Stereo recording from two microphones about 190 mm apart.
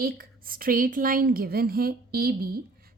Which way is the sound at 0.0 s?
50° right (ahead or behind).